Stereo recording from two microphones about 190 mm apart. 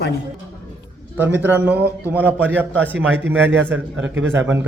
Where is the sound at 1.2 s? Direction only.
10° right (ahead or behind).